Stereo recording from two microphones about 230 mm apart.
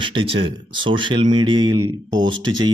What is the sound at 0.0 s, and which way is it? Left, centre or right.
A man's voice, right.